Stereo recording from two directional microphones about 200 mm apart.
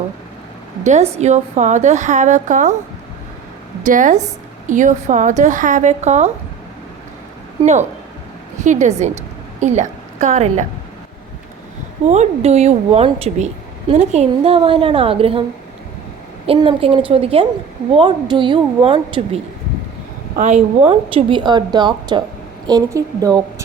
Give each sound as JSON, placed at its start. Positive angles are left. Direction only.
{"t": 1.2, "sound": "a woman's voice", "side_deg": -35}
{"t": 3.8, "sound": "a woman's voice", "side_deg": -40}
{"t": 7.6, "sound": "a woman's voice", "side_deg": -35}
{"t": 12.0, "sound": "a woman's voice", "side_deg": -35}
{"t": 16.5, "sound": "a woman's voice", "side_deg": -25}
{"t": 20.3, "sound": "speech", "side_deg": -35}
{"t": 20.8, "sound": "a woman's voice", "side_deg": -25}